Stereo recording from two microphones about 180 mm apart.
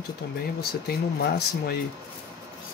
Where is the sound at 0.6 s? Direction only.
60° left (ahead or behind).